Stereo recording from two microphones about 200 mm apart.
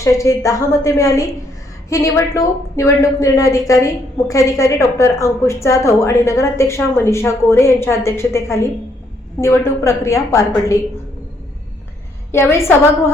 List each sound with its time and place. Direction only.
0.0 s a woman's voice: 15° left (ahead or behind)
12.3 s a woman's voice: 15° left (ahead or behind)